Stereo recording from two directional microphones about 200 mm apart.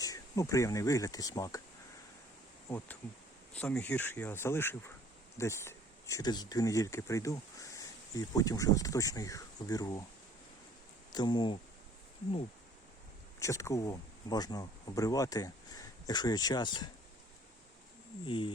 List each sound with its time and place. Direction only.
0.0 s speech: 15° left (ahead or behind)
2.6 s speech: 10° left (ahead or behind)
11.1 s speech: 20° left (ahead or behind)
13.4 s speech: 15° left (ahead or behind)
18.3 s speech: 25° left (ahead or behind)